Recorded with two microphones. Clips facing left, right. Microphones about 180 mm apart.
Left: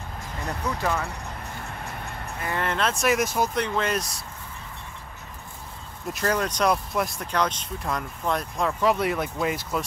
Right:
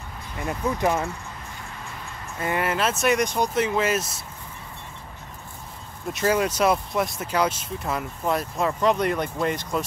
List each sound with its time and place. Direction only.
0.5 s speech: 20° right (ahead or behind)
2.6 s speech: 5° right (ahead or behind)
6.1 s speech: 10° right (ahead or behind)